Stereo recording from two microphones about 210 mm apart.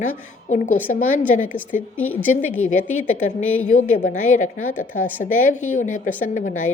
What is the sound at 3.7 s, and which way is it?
A woman's voice, 35° left (ahead or behind).